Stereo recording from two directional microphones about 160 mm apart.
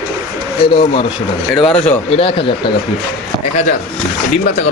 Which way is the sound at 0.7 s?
30° left (ahead or behind).